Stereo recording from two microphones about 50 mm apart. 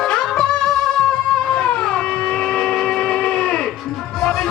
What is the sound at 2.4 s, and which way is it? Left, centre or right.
Train, centre.